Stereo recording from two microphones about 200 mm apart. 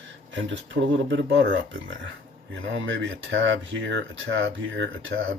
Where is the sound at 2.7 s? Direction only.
75° right (ahead or behind).